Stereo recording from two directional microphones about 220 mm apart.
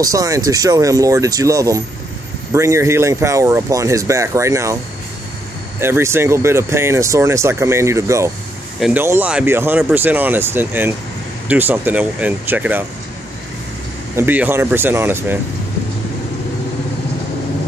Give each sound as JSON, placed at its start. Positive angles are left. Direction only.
{"t": 0.0, "sound": "speech", "side_deg": -15}
{"t": 5.8, "sound": "speech", "side_deg": -10}
{"t": 14.1, "sound": "speech", "side_deg": -10}